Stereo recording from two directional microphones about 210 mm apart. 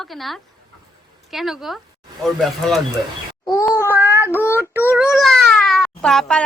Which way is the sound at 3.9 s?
10° right (ahead or behind).